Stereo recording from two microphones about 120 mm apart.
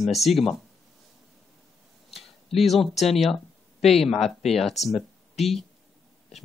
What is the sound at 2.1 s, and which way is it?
Speech, centre (ahead or behind).